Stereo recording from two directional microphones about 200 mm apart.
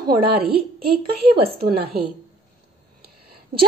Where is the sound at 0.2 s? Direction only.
50° right (ahead or behind).